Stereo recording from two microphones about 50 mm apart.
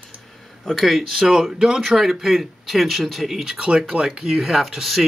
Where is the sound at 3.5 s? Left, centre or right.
Right.